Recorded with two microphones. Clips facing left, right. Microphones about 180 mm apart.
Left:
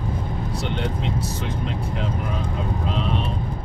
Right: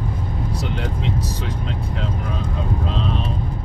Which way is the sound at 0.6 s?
Centre (ahead or behind).